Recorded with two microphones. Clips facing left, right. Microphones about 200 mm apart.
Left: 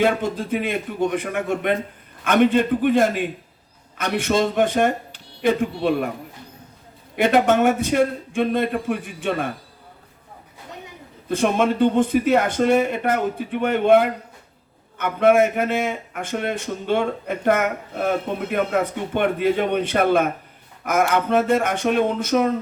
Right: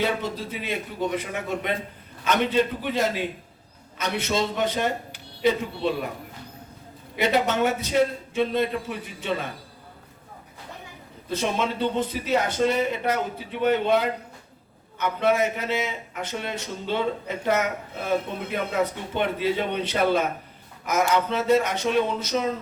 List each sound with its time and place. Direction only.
0.0 s a man's voice: 50° left (ahead or behind)
7.2 s a man's voice: 50° left (ahead or behind)
11.3 s a man's voice: 55° left (ahead or behind)